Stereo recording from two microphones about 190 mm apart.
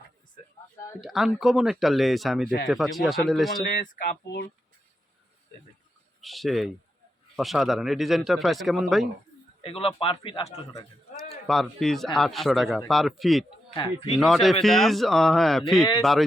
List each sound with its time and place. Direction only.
1.0 s speech: centre (ahead or behind)
3.8 s speech: 45° left (ahead or behind)
6.2 s speech: centre (ahead or behind)
9.6 s speech: 30° left (ahead or behind)
11.4 s speech: centre (ahead or behind)
13.7 s speech: 25° left (ahead or behind)
14.2 s speech: centre (ahead or behind)